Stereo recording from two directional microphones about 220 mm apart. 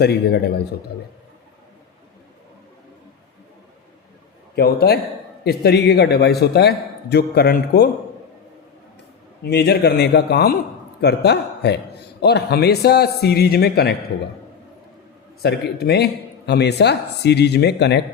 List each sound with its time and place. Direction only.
0.0 s a man's voice: 50° left (ahead or behind)
4.5 s a man's voice: 45° left (ahead or behind)
9.4 s a man's voice: 50° left (ahead or behind)
15.4 s a man's voice: 45° left (ahead or behind)